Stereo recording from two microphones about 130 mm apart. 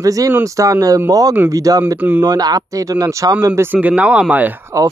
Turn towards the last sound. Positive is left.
turn(degrees=-15)  # may be behind; listen again after turning